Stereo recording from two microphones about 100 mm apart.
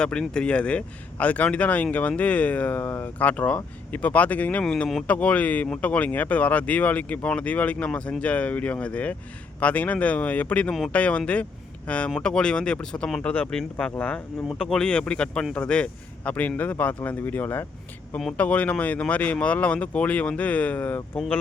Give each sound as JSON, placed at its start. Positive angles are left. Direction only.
{"t": 0.0, "sound": "speech", "side_deg": 10}
{"t": 4.6, "sound": "speech", "side_deg": 5}
{"t": 5.0, "sound": "speech", "side_deg": 15}